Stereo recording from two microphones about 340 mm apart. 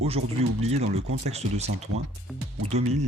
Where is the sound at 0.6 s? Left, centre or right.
Centre.